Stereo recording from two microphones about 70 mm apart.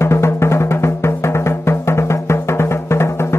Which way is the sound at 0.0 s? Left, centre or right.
Left.